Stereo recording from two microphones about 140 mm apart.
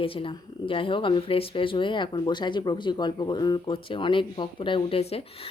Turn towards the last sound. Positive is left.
turn(degrees=45)  # may be behind; listen again after turning